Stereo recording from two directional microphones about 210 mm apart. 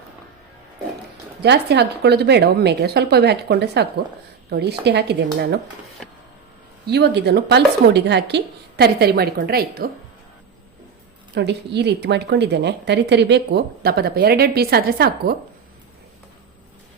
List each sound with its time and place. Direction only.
1.4 s a woman's voice: 50° right (ahead or behind)
6.8 s a woman's voice: 55° right (ahead or behind)
11.3 s a woman's voice: 55° right (ahead or behind)